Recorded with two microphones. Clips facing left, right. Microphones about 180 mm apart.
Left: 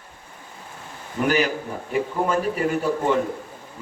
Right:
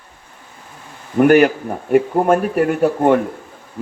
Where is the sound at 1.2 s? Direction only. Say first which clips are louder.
Right 10 dB; 60° right (ahead or behind).